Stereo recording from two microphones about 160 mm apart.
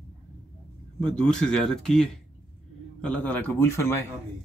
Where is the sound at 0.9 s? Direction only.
5° left (ahead or behind).